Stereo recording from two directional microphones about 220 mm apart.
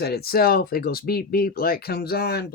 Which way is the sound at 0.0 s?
45° left (ahead or behind).